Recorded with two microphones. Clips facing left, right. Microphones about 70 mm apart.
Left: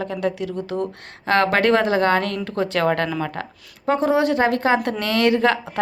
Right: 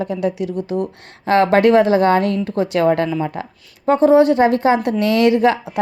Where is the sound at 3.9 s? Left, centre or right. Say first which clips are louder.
Right 7 dB; right.